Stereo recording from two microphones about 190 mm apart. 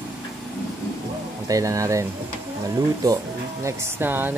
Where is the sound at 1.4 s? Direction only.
15° right (ahead or behind).